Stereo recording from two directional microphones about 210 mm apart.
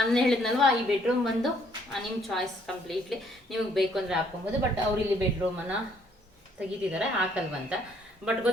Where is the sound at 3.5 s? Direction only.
Centre (ahead or behind).